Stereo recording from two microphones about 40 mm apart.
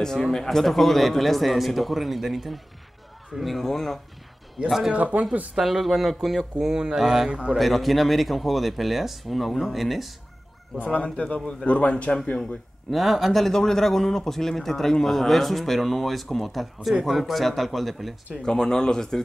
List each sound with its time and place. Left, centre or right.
0.0 s speech: centre
4.9 s speech: right
5.6 s speech: centre
6.7 s speech: centre
7.2 s a man's voice: right
7.5 s speech: centre
11.1 s speech: left
12.4 s speech: centre
18.4 s speech: centre